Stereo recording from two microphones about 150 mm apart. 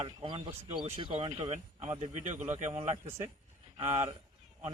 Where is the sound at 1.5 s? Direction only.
45° right (ahead or behind).